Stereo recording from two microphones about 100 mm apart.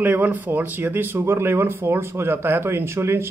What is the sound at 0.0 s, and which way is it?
Speech, 20° right (ahead or behind).